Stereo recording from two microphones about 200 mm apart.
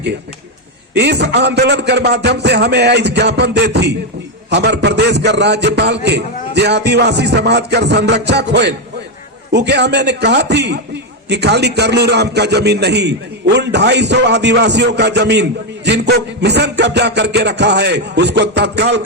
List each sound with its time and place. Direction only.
0.9 s a man's voice: 60° right (ahead or behind)